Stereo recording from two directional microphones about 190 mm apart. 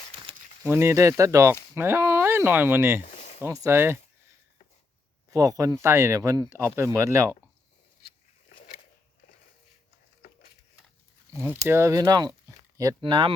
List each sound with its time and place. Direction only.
0.3 s a sound: 25° right (ahead or behind)
0.6 s speech: 15° right (ahead or behind)
3.0 s a sound: 35° left (ahead or behind)
3.4 s speech: 15° right (ahead or behind)
5.3 s speech: 15° right (ahead or behind)
11.3 s speech: 10° right (ahead or behind)